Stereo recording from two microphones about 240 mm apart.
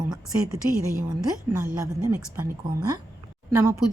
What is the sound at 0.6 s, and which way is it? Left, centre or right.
Speech, right.